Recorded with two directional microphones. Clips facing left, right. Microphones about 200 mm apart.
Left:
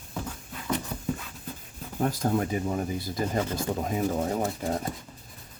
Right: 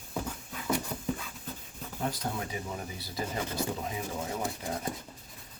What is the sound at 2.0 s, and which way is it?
Speech, 50° left (ahead or behind).